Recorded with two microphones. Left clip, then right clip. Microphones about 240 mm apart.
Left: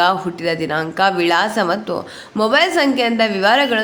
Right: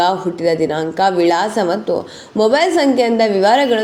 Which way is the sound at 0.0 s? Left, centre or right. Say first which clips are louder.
Right 1 dB; centre.